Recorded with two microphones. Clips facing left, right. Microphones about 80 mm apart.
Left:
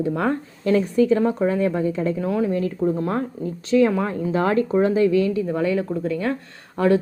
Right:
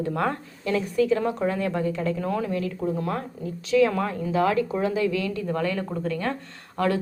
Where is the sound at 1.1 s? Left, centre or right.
Centre.